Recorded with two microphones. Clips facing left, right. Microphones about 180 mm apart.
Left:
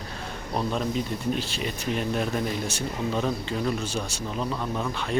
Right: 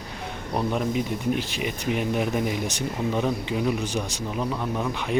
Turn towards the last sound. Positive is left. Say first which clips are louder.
# right 2 dB
turn(degrees=-15)  # may be behind; listen again after turning